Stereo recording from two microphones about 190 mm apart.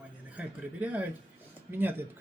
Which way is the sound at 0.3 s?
5° right (ahead or behind).